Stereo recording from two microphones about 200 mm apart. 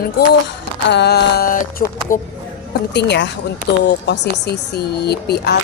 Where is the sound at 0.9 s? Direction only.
55° left (ahead or behind).